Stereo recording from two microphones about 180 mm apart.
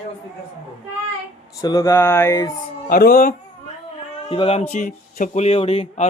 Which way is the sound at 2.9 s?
50° left (ahead or behind).